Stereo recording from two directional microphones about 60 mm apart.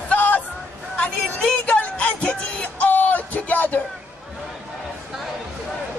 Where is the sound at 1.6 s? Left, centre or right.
Left.